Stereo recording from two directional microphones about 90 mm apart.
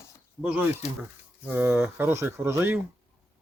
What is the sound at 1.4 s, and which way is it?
Speech, 20° right (ahead or behind).